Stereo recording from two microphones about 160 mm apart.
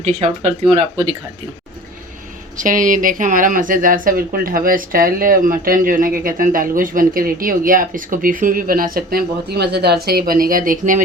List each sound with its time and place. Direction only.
0.0 s speech: 45° right (ahead or behind)
2.6 s speech: 55° right (ahead or behind)